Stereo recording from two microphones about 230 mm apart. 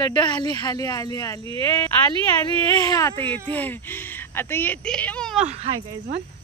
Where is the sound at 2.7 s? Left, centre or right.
Centre.